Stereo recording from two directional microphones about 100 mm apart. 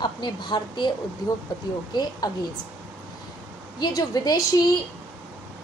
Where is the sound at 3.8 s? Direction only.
40° left (ahead or behind).